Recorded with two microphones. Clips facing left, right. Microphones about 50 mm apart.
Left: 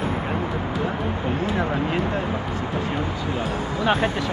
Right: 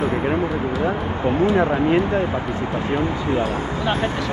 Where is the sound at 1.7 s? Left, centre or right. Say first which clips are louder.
Right 6 dB; centre.